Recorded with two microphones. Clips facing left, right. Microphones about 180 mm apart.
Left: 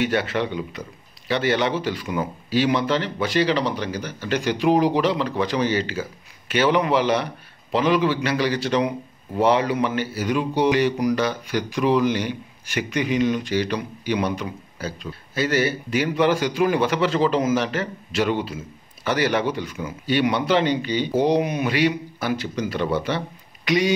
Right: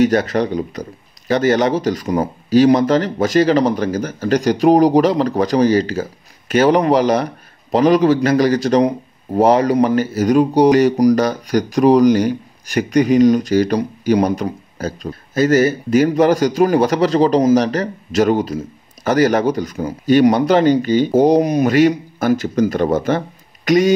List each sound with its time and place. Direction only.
0.0 s a man's voice: 40° right (ahead or behind)